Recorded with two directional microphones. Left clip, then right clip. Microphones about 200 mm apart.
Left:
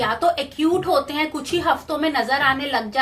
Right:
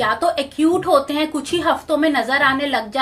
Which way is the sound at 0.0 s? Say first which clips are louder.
Right 2 dB; 30° right (ahead or behind).